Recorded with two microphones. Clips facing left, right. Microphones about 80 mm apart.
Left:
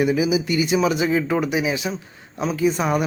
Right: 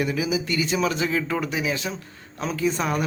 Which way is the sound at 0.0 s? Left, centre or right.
Centre.